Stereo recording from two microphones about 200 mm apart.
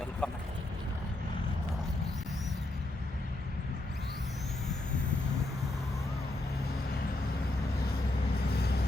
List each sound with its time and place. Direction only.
0.2 s vehicle: 5° left (ahead or behind)
8.4 s vehicle: 50° left (ahead or behind)